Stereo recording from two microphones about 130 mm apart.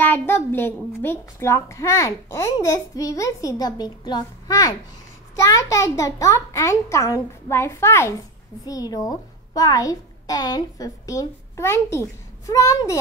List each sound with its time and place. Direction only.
0.0 s a child's voice: 15° left (ahead or behind)